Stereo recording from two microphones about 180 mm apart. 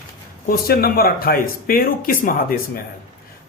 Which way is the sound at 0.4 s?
55° left (ahead or behind).